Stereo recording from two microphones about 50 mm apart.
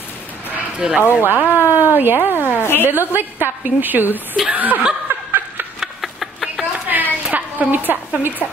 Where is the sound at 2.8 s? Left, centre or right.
Right.